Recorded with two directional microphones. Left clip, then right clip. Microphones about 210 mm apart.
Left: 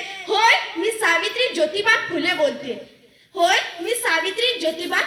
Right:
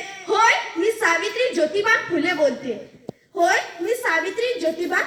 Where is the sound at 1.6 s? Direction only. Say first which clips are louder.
Left 1 dB; 55° right (ahead or behind).